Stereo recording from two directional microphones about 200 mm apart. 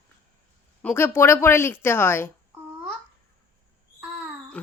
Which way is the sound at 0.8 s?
10° left (ahead or behind).